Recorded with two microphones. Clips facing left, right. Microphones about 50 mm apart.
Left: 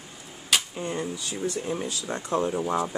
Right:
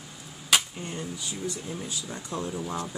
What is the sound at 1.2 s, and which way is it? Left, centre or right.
Speech, left.